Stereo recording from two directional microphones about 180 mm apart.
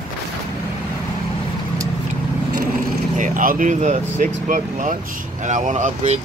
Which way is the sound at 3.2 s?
50° right (ahead or behind).